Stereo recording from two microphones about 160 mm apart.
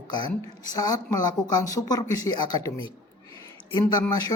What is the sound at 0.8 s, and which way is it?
A woman's voice, 20° left (ahead or behind).